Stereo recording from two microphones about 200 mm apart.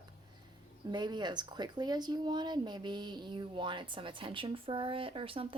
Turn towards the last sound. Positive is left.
turn(degrees=-25)  # may be behind; listen again after turning